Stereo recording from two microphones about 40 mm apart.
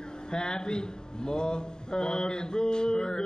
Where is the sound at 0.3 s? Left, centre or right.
Left.